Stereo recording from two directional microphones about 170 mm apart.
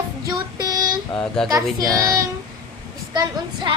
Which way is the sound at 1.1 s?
5° left (ahead or behind).